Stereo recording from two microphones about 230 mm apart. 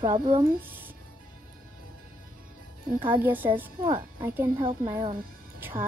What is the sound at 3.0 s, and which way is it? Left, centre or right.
A woman's voice, centre.